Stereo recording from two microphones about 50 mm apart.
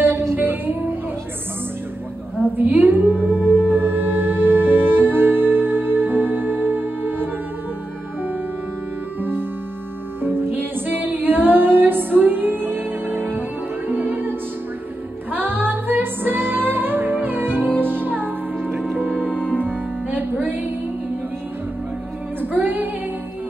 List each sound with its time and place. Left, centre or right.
0.4 s music: right
2.5 s a woman's voice: right
3.3 s music: right
9.2 s music: right
15.3 s music: right
22.4 s music: right